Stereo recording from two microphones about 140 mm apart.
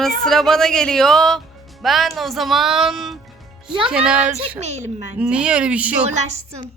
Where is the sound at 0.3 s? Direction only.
Centre (ahead or behind).